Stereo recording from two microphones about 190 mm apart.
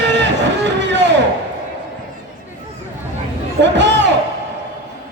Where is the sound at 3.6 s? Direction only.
70° right (ahead or behind).